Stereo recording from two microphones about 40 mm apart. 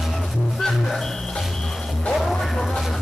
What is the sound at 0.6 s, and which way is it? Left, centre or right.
Music, centre.